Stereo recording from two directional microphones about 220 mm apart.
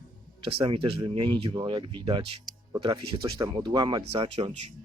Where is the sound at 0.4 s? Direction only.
25° right (ahead or behind).